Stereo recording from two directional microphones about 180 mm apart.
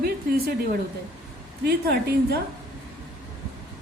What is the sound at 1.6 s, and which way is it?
Speech, 60° right (ahead or behind).